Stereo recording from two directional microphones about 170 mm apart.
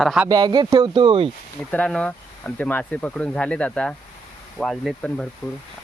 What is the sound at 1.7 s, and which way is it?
Speech, 5° left (ahead or behind).